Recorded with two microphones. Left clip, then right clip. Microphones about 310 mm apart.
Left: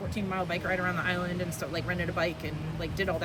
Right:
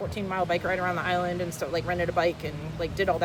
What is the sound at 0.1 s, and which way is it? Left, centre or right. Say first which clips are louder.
Speech: right 4 dB; centre.